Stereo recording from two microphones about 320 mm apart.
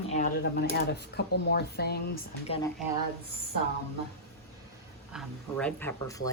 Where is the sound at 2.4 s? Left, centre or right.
Centre.